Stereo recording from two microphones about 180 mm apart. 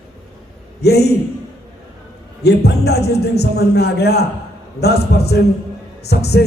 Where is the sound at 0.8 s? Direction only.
65° left (ahead or behind).